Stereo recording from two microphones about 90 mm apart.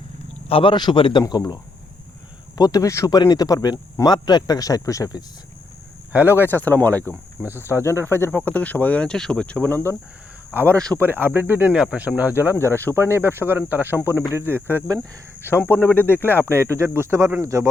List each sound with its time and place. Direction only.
0.4 s a man's voice: 80° left
1.3 s speech: 50° left (ahead or behind)
2.6 s speech: 45° left (ahead or behind)
3.2 s speech: 45° left (ahead or behind)
6.1 s speech: 25° right (ahead or behind)
6.5 s speech: 20° left (ahead or behind)
7.4 s speech: 25° right (ahead or behind)
8.0 s speech: 25° left (ahead or behind)
10.5 s speech: 25° right (ahead or behind)
12.5 s speech: 25° left (ahead or behind)
13.0 s speech: 30° right (ahead or behind)
15.4 s speech: 25° left (ahead or behind)
16.4 s speech: 30° right (ahead or behind)